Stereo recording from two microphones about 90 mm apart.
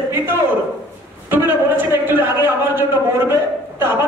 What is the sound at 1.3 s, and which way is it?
A man's voice, 25° right (ahead or behind).